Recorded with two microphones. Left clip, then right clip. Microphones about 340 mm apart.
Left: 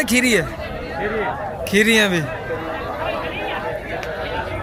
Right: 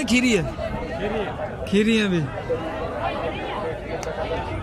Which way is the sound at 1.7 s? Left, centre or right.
Centre.